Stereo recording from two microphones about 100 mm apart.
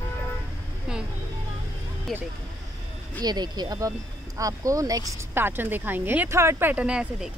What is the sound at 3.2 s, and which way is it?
Speech, 45° right (ahead or behind).